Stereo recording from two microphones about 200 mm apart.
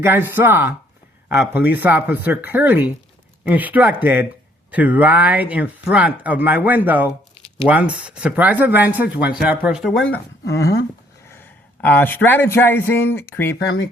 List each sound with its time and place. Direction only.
0.0 s speech: 10° right (ahead or behind)
10.4 s speech: 55° left (ahead or behind)
11.3 s a man's voice: 10° left (ahead or behind)